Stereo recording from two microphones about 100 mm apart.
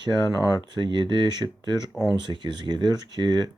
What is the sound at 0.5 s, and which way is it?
Speech, 45° right (ahead or behind).